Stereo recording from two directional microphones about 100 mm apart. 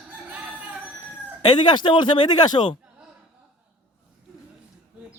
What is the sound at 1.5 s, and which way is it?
Speech, 45° left (ahead or behind).